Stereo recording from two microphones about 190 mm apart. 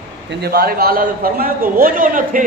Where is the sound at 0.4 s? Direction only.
55° right (ahead or behind).